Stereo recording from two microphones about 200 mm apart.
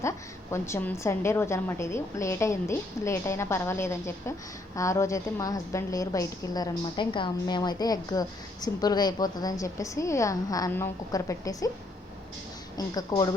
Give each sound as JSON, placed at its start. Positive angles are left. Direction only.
{"t": 0.5, "sound": "a woman's voice", "side_deg": 15}
{"t": 12.7, "sound": "speech", "side_deg": 20}